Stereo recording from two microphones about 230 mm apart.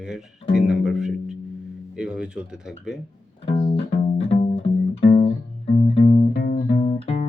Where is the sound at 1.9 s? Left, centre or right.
Centre.